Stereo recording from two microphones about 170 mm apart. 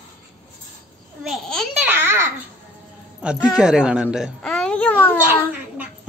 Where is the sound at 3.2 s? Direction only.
5° right (ahead or behind); by 5.5 s 10° left (ahead or behind).